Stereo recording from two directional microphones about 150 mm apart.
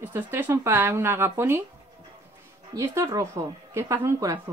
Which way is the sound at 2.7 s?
25° right (ahead or behind).